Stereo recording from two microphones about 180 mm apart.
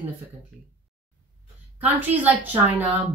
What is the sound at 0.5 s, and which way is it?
Speech, centre (ahead or behind).